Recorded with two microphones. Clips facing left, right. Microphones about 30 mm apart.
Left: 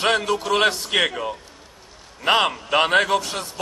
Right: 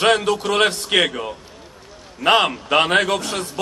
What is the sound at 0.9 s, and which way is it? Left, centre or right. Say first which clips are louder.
Speech: right 5 dB; right.